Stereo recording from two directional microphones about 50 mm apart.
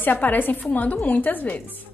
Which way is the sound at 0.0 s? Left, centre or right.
Left.